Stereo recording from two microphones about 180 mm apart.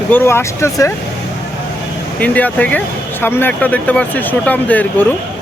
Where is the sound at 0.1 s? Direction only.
10° left (ahead or behind).